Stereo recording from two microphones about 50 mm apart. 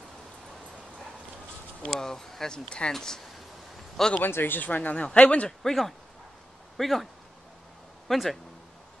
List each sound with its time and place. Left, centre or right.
1.8 s speech: centre
4.2 s a man's voice: left
5.6 s speech: centre
8.1 s speech: centre